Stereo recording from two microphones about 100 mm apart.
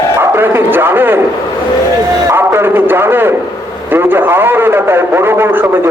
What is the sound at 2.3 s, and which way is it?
A man's voice, 25° right (ahead or behind).